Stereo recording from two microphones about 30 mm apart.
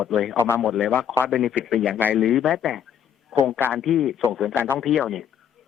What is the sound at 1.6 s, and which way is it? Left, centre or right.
Speech, centre.